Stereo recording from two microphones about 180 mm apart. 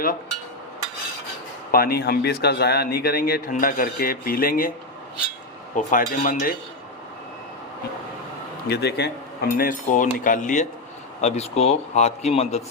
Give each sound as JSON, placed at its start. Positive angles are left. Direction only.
{"t": 1.7, "sound": "a man's voice", "side_deg": 60}
{"t": 5.7, "sound": "speech", "side_deg": 50}
{"t": 8.6, "sound": "a man's voice", "side_deg": 65}
{"t": 9.6, "sound": "a man's voice", "side_deg": 45}